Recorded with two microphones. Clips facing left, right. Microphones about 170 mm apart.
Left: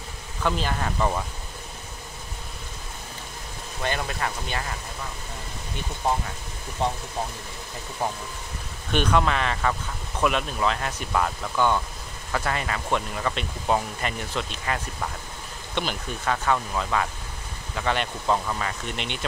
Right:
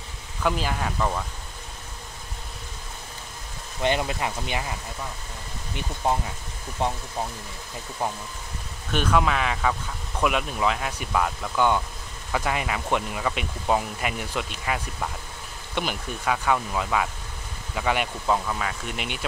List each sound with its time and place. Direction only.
0.4 s speech: 5° right (ahead or behind)
0.9 s speech: 5° left (ahead or behind)
3.8 s speech: 20° right (ahead or behind)
6.8 s speech: 15° right (ahead or behind)
8.9 s speech: 5° right (ahead or behind)
18.2 s speech: centre (ahead or behind)